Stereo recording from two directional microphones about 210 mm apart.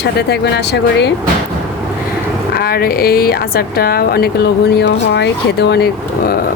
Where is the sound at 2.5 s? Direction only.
45° left (ahead or behind).